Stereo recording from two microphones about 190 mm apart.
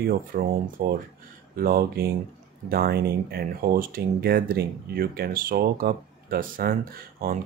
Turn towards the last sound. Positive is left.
turn(degrees=-50)  # may be behind; listen again after turning